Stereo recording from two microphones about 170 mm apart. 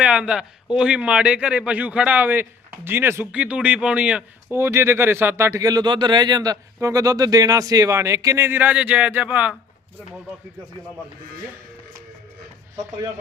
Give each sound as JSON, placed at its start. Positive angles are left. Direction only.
{"t": 0.0, "sound": "speech", "side_deg": -5}